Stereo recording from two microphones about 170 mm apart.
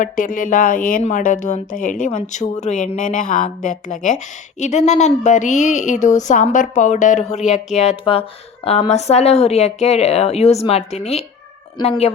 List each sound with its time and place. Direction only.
0.0 s a woman's voice: 50° left (ahead or behind); by 12.1 s 35° left (ahead or behind)